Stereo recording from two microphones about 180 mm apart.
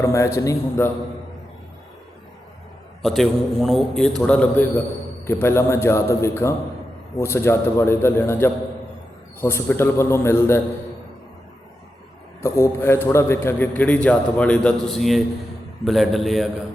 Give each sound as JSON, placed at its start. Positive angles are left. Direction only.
{"t": 0.0, "sound": "a man's voice", "side_deg": 15}
{"t": 3.0, "sound": "a man's voice", "side_deg": 0}
{"t": 12.4, "sound": "a man's voice", "side_deg": 15}